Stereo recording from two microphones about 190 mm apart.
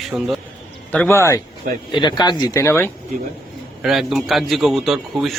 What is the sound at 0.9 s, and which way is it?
Speech, 10° left (ahead or behind).